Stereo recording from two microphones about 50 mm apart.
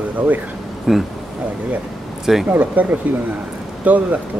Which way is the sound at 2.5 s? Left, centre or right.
Right.